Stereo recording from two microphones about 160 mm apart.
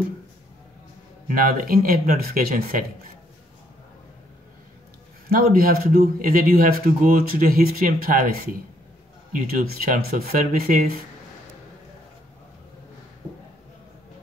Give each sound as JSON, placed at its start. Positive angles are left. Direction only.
{"t": 1.2, "sound": "a man's voice", "side_deg": -60}
{"t": 5.3, "sound": "a man's voice", "side_deg": -65}